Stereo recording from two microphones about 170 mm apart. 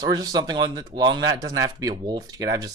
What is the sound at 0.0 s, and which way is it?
Speech, 25° right (ahead or behind).